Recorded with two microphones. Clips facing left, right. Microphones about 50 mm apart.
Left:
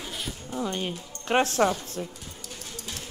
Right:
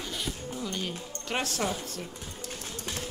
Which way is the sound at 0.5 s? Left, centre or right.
Left.